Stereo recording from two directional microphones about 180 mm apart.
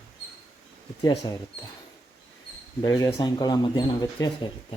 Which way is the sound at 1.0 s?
20° left (ahead or behind).